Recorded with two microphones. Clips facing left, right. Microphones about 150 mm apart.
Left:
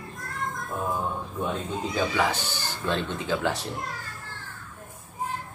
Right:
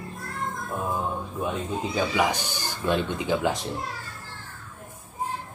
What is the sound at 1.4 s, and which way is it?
Speech, 10° right (ahead or behind).